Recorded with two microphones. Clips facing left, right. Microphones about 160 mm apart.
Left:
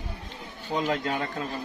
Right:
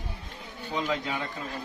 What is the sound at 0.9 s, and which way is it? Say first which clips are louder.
Speech: left 3 dB; 50° left (ahead or behind).